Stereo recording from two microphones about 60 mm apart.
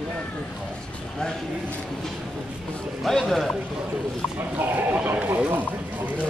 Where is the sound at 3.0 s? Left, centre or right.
Centre.